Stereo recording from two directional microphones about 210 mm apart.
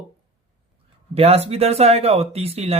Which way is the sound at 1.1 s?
30° right (ahead or behind).